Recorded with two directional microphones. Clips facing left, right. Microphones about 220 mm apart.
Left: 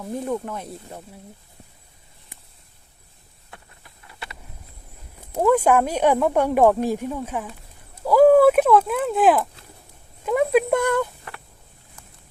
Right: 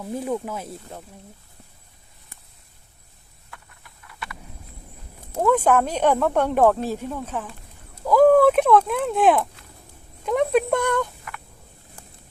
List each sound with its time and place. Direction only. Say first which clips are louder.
0.3 s speech: even; 5° right (ahead or behind)
3.5 s clip-clop: left 1 dB; 25° left (ahead or behind)
5.3 s speech: left 1 dB; 10° left (ahead or behind)
8.0 s a sound: left 1 dB; 10° left (ahead or behind)
10.2 s speech: left 1 dB; 5° left (ahead or behind)